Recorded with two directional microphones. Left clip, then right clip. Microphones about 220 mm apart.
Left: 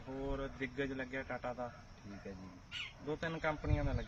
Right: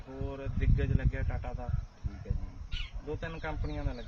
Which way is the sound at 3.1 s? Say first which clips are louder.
Left 1 dB; 5° right (ahead or behind).